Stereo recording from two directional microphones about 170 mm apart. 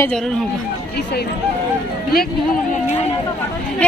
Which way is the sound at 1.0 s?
80° left.